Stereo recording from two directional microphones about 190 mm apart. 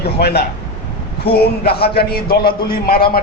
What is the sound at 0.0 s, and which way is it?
A man's voice, 55° left (ahead or behind).